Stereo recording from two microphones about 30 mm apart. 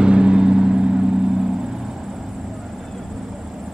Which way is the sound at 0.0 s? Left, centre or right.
Right.